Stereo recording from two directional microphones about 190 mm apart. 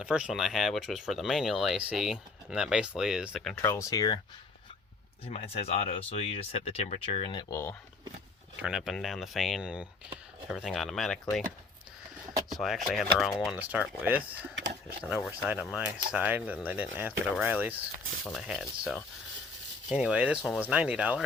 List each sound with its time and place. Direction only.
0.0 s speech: 5° right (ahead or behind)
3.6 s speech: 15° left (ahead or behind)
5.3 s speech: 35° left (ahead or behind); by 7.8 s 15° left (ahead or behind)
8.6 s speech: centre (ahead or behind)
12.5 s speech: centre (ahead or behind)
14.5 s a sound: 65° right (ahead or behind)
15.1 s speech: 5° right (ahead or behind)